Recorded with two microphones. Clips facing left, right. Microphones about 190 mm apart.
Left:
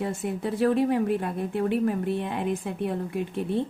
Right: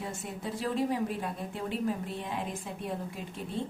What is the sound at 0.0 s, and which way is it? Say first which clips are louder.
Speech: left 9 dB; 60° left (ahead or behind).